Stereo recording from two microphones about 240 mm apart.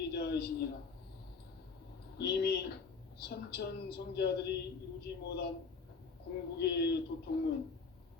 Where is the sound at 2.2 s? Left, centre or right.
Left.